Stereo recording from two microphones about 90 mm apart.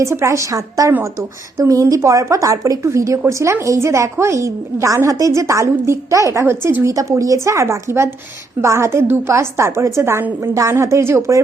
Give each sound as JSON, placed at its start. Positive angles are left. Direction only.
{"t": 0.0, "sound": "a woman's voice", "side_deg": -35}